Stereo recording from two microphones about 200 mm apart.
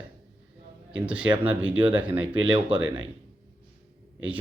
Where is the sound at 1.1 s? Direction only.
5° right (ahead or behind).